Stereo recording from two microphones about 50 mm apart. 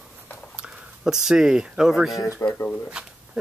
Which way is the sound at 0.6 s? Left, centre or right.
Centre.